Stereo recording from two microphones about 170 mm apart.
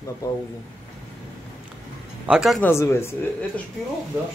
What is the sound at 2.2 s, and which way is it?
Speech, 5° right (ahead or behind).